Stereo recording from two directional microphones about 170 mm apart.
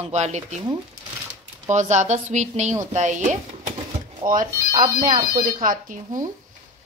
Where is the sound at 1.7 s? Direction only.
45° right (ahead or behind).